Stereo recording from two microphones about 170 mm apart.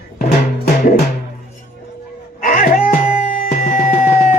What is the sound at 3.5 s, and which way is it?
Music, 55° left (ahead or behind).